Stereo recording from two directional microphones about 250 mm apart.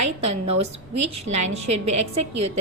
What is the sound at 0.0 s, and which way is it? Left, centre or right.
A woman's voice, right.